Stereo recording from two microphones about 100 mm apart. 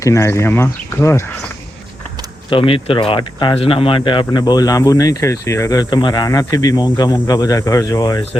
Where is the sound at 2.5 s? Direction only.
65° left (ahead or behind); by 3.5 s 50° left (ahead or behind).